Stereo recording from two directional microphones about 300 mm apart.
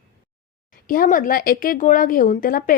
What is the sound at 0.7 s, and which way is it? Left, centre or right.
A woman's voice, left.